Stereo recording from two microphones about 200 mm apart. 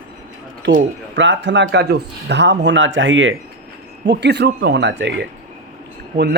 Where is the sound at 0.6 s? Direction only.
50° right (ahead or behind); by 3.3 s 70° right (ahead or behind).